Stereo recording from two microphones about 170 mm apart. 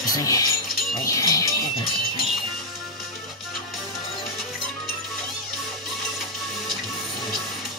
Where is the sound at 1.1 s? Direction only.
20° left (ahead or behind).